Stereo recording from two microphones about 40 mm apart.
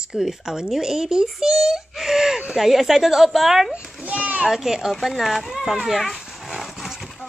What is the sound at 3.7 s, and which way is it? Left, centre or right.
Children playing, right.